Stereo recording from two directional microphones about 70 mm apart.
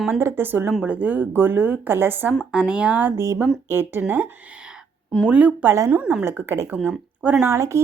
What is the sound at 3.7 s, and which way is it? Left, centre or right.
Speech, right.